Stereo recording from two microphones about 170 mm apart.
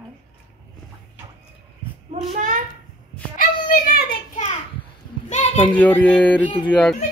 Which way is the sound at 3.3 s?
60° left (ahead or behind).